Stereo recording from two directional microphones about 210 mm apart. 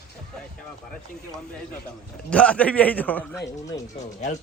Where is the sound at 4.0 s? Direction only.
35° left (ahead or behind).